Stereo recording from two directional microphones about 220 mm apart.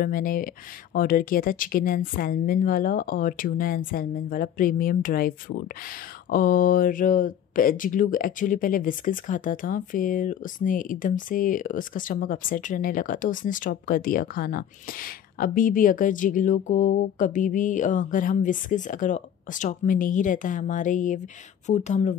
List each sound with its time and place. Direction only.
0.0 s speech: 40° left (ahead or behind)
6.3 s speech: 40° left (ahead or behind)